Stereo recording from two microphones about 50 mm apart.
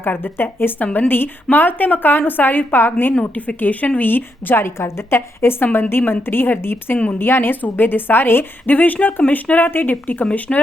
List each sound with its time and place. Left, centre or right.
0.0 s a woman's voice: left
3.3 s a woman's voice: left
6.9 s a woman's voice: left
7.2 s a woman's voice: left
9.6 s a woman's voice: left
10.5 s speech: centre